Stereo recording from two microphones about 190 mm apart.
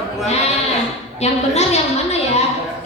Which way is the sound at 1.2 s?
35° left (ahead or behind).